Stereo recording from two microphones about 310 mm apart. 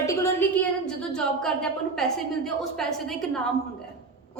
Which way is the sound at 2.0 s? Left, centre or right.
Centre.